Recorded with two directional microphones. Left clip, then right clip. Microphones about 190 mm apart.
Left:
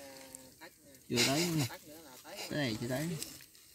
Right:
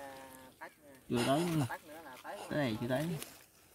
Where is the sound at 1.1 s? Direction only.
15° left (ahead or behind).